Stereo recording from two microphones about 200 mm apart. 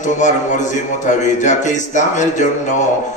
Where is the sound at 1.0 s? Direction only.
40° left (ahead or behind).